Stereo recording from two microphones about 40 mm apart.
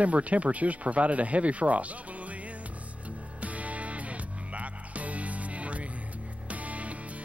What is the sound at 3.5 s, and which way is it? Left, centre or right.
Music, right.